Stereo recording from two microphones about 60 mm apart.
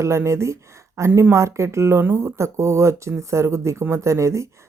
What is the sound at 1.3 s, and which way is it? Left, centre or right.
Speech, right.